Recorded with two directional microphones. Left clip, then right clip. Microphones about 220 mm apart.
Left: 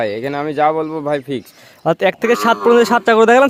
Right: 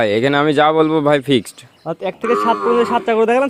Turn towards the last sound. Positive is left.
turn(degrees=30)  # may be behind; listen again after turning